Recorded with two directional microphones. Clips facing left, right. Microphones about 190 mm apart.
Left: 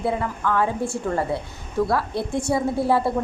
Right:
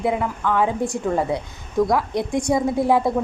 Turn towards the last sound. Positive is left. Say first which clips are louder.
# right 2 dB
turn(degrees=-15)  # may be behind; listen again after turning